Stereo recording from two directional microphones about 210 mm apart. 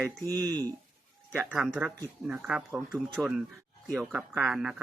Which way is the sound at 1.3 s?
5° right (ahead or behind).